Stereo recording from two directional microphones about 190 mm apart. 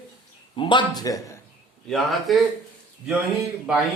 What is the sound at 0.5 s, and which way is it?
Speech, 25° left (ahead or behind).